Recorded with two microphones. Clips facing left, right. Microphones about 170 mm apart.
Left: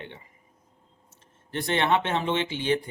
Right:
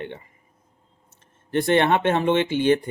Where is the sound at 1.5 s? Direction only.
55° right (ahead or behind).